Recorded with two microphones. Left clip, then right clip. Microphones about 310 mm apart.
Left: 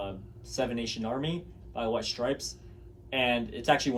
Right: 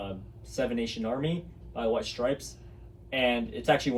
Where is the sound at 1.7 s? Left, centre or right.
Centre.